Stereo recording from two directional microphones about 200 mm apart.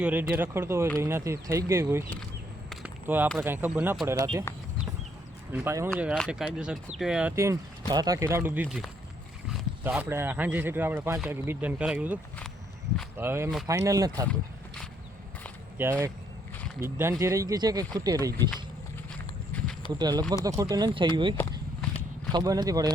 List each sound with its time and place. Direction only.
0.0 s speech: 10° right (ahead or behind)
2.6 s a sound: 10° right (ahead or behind)
3.3 s speech: 10° right (ahead or behind)
5.5 s speech: 10° right (ahead or behind)
15.8 s speech: 15° right (ahead or behind)
19.9 s speech: 20° right (ahead or behind)